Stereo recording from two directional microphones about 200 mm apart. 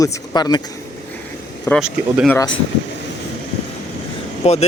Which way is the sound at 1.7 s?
15° left (ahead or behind).